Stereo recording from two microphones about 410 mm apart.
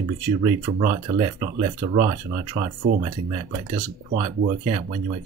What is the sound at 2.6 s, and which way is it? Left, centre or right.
Speech, centre.